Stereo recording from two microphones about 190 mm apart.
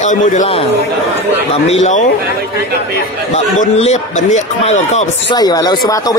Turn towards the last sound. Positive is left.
turn(degrees=20)  # may be behind; listen again after turning